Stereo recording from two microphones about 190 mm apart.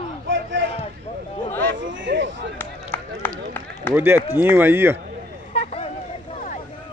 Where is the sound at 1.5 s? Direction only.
10° left (ahead or behind).